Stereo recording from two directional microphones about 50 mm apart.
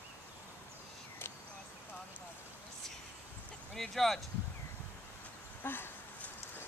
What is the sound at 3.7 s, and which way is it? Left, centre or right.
Speech, centre.